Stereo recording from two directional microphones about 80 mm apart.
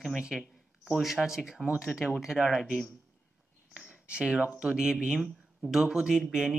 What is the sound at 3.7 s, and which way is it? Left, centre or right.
Speech, centre.